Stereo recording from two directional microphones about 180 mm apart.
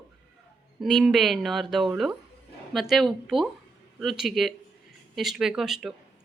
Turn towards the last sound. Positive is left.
turn(degrees=0)  # may be behind; listen again after turning